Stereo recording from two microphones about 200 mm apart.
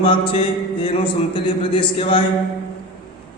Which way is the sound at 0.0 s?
25° left (ahead or behind).